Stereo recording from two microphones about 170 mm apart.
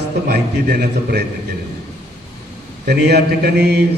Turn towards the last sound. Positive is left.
turn(degrees=-75)  # may be behind; listen again after turning